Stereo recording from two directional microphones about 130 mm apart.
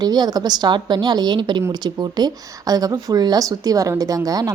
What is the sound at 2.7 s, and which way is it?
A woman's voice, 30° right (ahead or behind).